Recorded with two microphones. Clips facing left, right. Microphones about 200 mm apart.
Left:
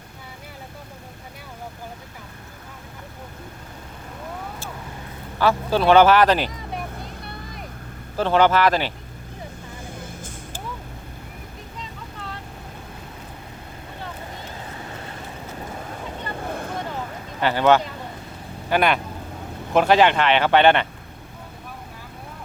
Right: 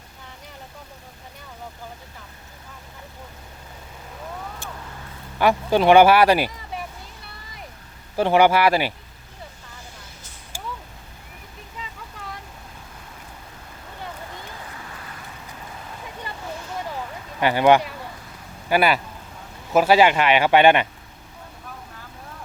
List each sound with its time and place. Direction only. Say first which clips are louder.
5.4 s speech: right 1 dB; 15° right (ahead or behind)
8.1 s speech: right 1 dB; 15° right (ahead or behind)
10.0 s vehicle: left 10 dB; 50° left (ahead or behind)
14.8 s vehicle: left 4 dB; 25° left (ahead or behind)
16.5 s vehicle: left 4 dB; 55° left (ahead or behind)
17.4 s speech: right 1 dB; 15° right (ahead or behind)